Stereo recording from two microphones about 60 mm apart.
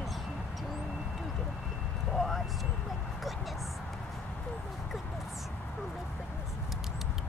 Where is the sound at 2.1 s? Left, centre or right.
Centre.